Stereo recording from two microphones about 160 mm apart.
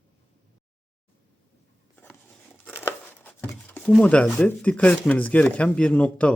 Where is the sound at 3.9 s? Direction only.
5° left (ahead or behind).